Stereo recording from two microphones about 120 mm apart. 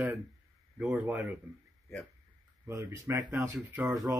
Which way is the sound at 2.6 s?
25° right (ahead or behind).